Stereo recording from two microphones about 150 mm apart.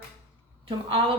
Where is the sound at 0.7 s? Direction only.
35° right (ahead or behind).